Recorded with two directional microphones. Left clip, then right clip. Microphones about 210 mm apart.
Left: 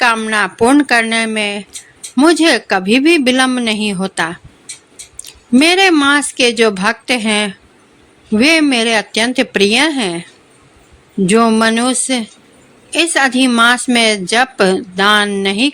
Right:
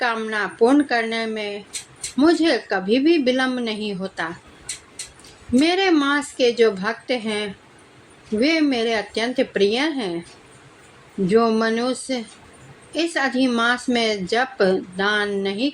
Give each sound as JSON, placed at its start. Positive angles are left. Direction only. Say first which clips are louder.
{"t": 0.0, "sound": "a woman's voice", "louder": "left 10 dB", "side_deg": 40}
{"t": 5.5, "sound": "a woman's voice", "louder": "left 8 dB", "side_deg": 40}
{"t": 11.3, "sound": "a woman's voice", "louder": "left 7 dB", "side_deg": 40}